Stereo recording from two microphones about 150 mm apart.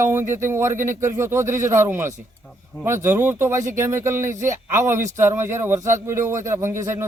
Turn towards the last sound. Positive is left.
turn(degrees=-20)  # may be behind; listen again after turning